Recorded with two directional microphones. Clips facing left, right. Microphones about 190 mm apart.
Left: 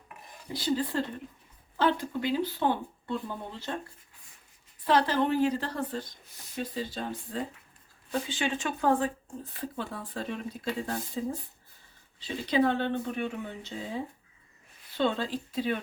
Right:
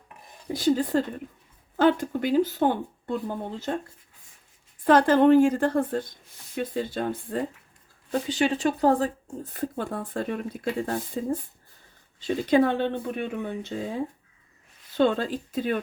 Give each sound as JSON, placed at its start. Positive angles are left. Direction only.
{"t": 0.4, "sound": "speech", "side_deg": -45}
{"t": 4.8, "sound": "speech", "side_deg": -50}
{"t": 8.3, "sound": "speech", "side_deg": -40}